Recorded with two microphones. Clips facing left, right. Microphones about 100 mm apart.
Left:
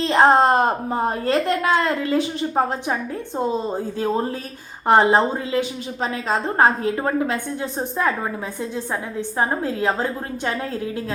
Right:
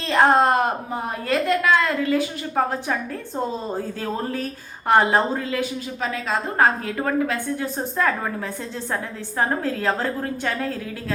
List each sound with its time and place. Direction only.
0.0 s speech: 25° left (ahead or behind)
9.4 s speech: 20° left (ahead or behind)